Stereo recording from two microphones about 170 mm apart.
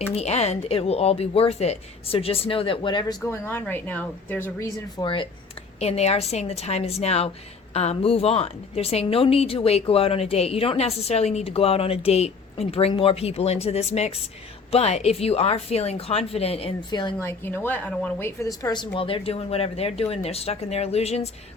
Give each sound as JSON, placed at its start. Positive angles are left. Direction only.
{"t": 0.1, "sound": "a woman's voice", "side_deg": 40}
{"t": 3.3, "sound": "a woman's voice", "side_deg": 10}
{"t": 4.9, "sound": "a woman's voice", "side_deg": 30}
{"t": 17.2, "sound": "a woman's voice", "side_deg": 10}